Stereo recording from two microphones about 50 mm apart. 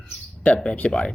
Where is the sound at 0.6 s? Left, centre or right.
Left.